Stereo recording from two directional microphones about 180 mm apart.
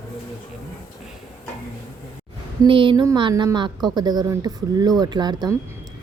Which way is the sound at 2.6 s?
30° right (ahead or behind).